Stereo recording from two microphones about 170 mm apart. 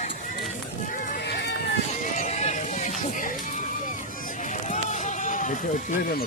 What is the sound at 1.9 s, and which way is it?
Horse, 45° left (ahead or behind).